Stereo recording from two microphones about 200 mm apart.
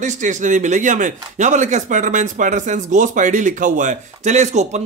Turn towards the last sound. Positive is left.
turn(degrees=-35)  # may be behind; listen again after turning